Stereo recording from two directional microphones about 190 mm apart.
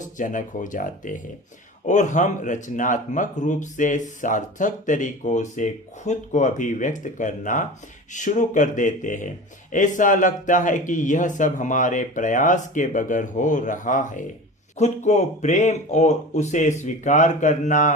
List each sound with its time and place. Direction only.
0.0 s speech: 45° left (ahead or behind)